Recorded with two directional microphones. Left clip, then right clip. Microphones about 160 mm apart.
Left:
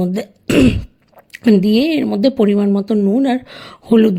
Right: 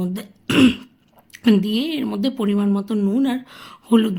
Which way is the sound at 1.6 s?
40° left (ahead or behind).